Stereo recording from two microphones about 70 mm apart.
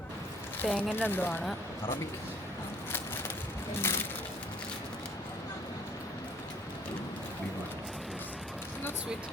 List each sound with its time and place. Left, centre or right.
0.6 s speech: left
3.8 s crushing: left